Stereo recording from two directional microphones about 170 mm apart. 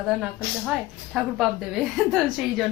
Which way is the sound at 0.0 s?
Centre (ahead or behind).